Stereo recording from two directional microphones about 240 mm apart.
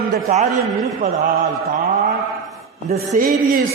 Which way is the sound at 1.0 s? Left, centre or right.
Right.